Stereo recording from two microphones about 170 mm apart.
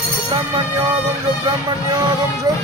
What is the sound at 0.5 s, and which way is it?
Music, 30° right (ahead or behind).